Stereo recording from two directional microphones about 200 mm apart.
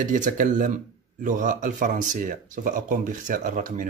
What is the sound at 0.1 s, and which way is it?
Speech, 40° right (ahead or behind).